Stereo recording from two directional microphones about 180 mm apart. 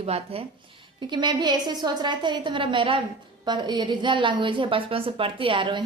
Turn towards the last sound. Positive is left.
turn(degrees=-25)  # may be behind; listen again after turning